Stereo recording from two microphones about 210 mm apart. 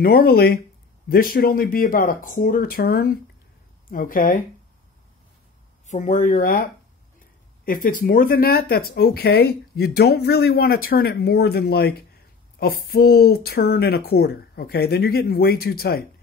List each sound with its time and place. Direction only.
0.0 s speech: 45° left (ahead or behind)
5.9 s speech: 35° left (ahead or behind)